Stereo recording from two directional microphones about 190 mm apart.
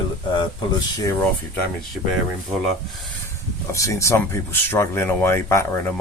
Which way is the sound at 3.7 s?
15° left (ahead or behind).